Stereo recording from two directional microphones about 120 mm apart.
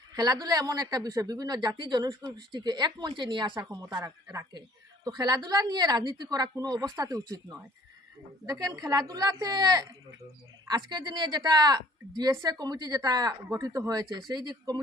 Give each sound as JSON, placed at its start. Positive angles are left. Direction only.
{"t": 0.1, "sound": "speech", "side_deg": -35}
{"t": 8.4, "sound": "speech", "side_deg": -30}